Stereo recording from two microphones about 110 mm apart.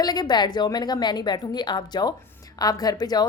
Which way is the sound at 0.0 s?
40° left (ahead or behind).